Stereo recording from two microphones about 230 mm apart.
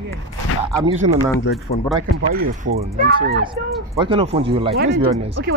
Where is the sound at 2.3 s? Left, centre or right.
Right.